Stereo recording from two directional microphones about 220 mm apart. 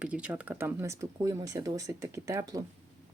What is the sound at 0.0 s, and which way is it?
Speech, 5° right (ahead or behind).